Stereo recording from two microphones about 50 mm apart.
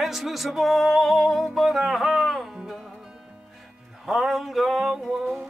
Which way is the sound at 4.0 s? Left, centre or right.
Centre.